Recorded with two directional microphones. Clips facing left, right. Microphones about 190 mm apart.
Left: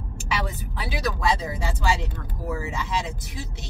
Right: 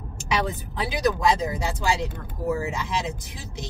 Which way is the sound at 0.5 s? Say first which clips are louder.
Right 3 dB; 20° right (ahead or behind).